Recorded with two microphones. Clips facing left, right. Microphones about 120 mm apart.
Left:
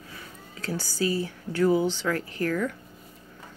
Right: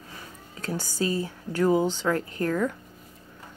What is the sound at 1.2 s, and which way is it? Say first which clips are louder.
Speech: even; 15° right (ahead or behind).